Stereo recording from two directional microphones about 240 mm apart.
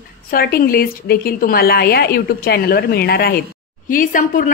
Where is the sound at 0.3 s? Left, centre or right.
Left.